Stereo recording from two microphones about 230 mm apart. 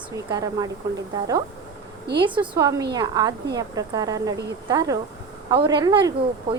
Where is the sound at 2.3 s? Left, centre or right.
Centre.